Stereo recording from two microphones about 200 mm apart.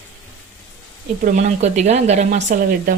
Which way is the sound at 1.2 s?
35° right (ahead or behind).